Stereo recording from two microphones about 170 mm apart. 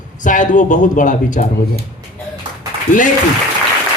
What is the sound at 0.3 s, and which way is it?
A woman's voice, 50° left (ahead or behind).